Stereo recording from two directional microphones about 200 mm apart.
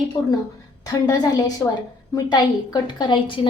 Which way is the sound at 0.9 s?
20° left (ahead or behind).